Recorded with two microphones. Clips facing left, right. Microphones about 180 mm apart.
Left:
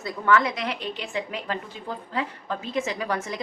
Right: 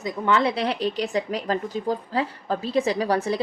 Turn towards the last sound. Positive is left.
turn(degrees=-35)  # may be behind; listen again after turning